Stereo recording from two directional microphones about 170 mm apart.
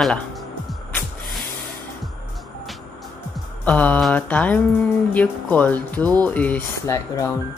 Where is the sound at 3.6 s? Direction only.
10° left (ahead or behind).